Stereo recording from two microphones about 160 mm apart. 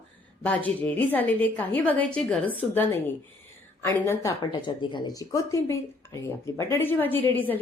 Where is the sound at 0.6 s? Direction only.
10° left (ahead or behind).